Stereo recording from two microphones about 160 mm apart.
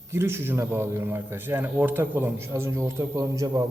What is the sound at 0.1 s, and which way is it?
A man's voice, 15° right (ahead or behind).